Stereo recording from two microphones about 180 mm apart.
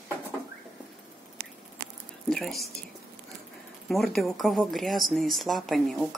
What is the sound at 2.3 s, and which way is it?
Speech, centre (ahead or behind).